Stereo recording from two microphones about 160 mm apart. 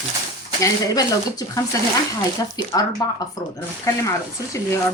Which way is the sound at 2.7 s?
25° left (ahead or behind).